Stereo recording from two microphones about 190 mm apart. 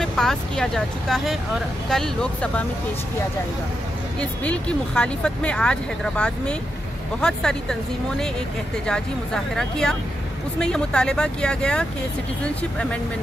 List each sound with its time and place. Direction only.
0.0 s speech: 5° left (ahead or behind)
4.2 s speech: 5° left (ahead or behind)
8.8 s speech: 5° left (ahead or behind)